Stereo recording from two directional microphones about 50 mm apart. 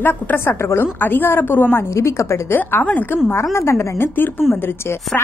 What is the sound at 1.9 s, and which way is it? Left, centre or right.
Speech, left.